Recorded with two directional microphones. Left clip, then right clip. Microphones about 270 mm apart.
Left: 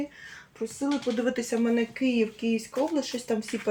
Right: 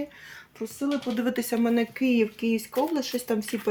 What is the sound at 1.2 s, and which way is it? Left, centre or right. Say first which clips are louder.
Speech: even; right.